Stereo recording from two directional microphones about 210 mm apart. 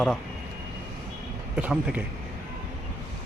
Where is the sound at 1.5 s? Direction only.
5° right (ahead or behind).